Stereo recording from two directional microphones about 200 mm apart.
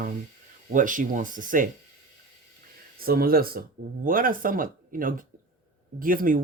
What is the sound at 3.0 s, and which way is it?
Speech, 50° right (ahead or behind).